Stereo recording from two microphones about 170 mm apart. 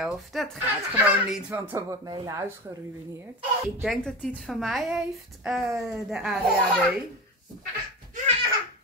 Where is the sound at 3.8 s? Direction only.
Centre (ahead or behind).